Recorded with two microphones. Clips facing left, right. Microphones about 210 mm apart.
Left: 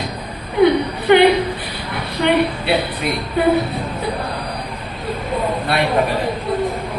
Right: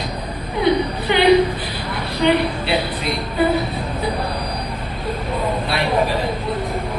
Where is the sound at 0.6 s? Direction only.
55° left (ahead or behind).